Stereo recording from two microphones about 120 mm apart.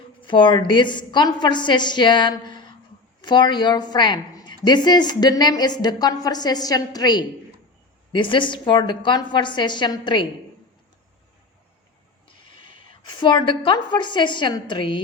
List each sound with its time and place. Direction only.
0.2 s a woman's voice: 45° left (ahead or behind)
12.6 s a woman's voice: 40° left (ahead or behind)